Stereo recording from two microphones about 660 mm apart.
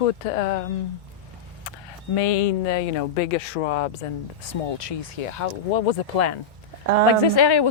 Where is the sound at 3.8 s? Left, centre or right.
Left.